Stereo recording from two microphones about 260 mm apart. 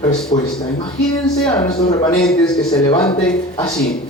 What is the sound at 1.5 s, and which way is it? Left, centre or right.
A man's voice, centre.